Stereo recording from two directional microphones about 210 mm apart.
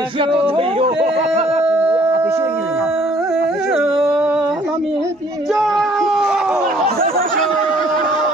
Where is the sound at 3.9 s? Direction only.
5° right (ahead or behind).